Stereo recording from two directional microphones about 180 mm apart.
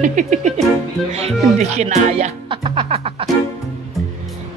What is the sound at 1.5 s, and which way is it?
Speech, 40° right (ahead or behind).